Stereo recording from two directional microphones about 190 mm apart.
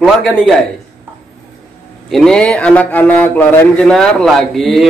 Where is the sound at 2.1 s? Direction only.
Centre (ahead or behind).